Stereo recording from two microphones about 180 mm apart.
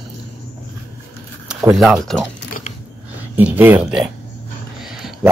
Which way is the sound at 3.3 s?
10° right (ahead or behind).